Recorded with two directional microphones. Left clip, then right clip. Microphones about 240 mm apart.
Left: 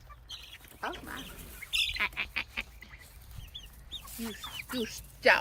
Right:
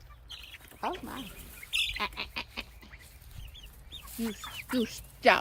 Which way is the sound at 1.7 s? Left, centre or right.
Centre.